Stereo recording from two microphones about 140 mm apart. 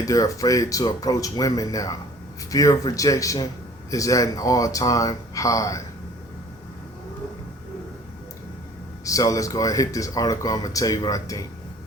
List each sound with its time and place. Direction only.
0.0 s speech: 25° left (ahead or behind)
9.0 s speech: 25° left (ahead or behind)